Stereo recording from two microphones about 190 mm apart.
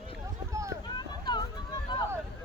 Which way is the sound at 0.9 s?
25° left (ahead or behind).